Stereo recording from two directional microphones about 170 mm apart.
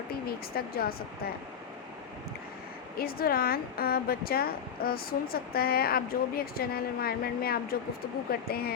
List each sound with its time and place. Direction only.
0.3 s speech: 65° left (ahead or behind)
3.0 s speech: 60° left (ahead or behind)